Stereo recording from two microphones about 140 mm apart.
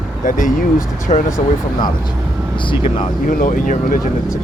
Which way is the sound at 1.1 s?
55° left (ahead or behind).